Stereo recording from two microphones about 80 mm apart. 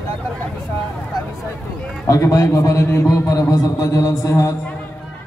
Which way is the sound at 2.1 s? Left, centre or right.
Left.